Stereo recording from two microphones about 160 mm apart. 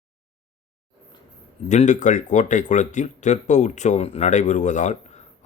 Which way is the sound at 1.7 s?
50° left (ahead or behind).